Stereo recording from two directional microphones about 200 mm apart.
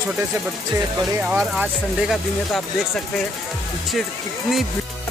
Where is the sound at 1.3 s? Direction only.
5° right (ahead or behind).